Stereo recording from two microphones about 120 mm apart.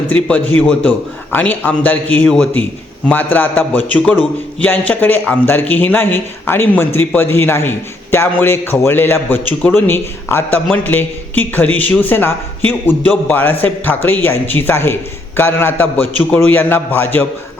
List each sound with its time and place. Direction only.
0.1 s a man's voice: 10° left (ahead or behind)